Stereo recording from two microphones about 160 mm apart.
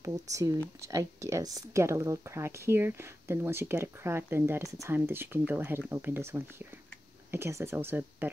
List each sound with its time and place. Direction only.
0.0 s speech: 20° right (ahead or behind)